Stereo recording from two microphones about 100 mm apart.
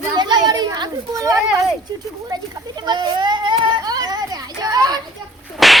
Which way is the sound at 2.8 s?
45° right (ahead or behind).